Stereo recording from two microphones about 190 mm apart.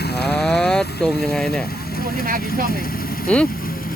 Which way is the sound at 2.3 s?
50° right (ahead or behind).